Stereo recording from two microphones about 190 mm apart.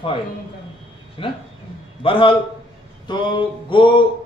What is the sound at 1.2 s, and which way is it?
A man's voice, 30° left (ahead or behind).